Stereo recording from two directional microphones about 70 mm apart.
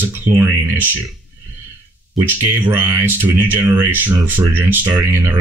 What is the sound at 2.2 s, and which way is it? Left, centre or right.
Speech, right.